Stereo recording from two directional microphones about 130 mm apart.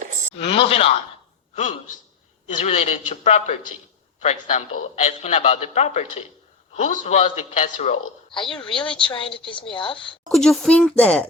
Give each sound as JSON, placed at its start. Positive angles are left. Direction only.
{"t": 0.3, "sound": "speech", "side_deg": 50}
{"t": 2.6, "sound": "a man's voice", "side_deg": 55}
{"t": 8.3, "sound": "a woman's voice", "side_deg": 40}
{"t": 10.2, "sound": "speech", "side_deg": 5}